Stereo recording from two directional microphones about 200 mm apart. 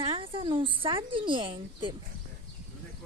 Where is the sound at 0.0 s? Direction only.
25° right (ahead or behind).